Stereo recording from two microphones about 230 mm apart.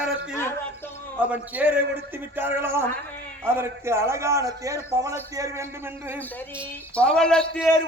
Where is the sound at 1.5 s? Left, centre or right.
Centre.